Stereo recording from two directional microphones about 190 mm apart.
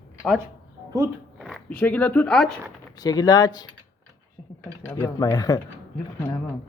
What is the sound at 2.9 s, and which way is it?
Speech, 20° left (ahead or behind).